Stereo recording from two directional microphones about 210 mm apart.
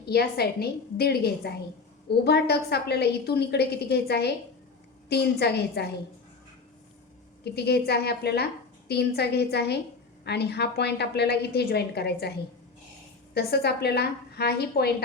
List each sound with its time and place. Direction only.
0.0 s a woman's voice: 50° left (ahead or behind)
7.4 s a woman's voice: 50° left (ahead or behind)
13.3 s a woman's voice: 50° left (ahead or behind)